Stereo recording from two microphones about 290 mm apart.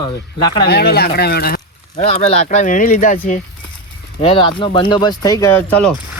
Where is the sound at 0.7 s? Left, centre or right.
Left.